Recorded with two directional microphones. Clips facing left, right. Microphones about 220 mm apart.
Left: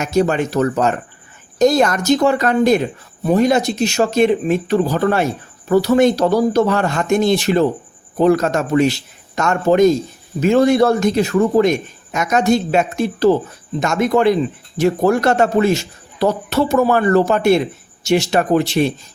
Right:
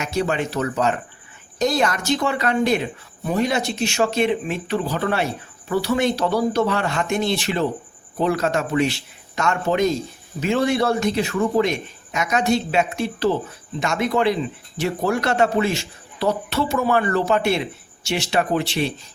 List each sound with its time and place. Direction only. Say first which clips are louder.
0.0 s speech: left 6 dB; 45° left (ahead or behind)